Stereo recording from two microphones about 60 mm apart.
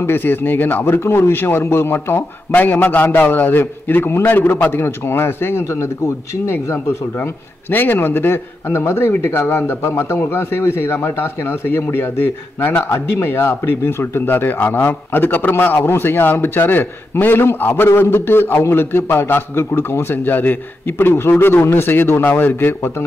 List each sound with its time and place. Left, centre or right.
0.0 s a man's voice: left
0.8 s a man's voice: left